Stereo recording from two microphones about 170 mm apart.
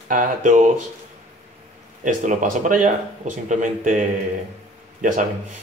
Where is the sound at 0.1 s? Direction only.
50° right (ahead or behind).